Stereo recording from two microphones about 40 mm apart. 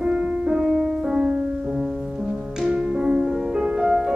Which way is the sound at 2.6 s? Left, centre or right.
Centre.